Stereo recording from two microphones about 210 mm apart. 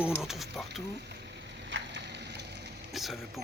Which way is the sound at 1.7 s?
55° right (ahead or behind).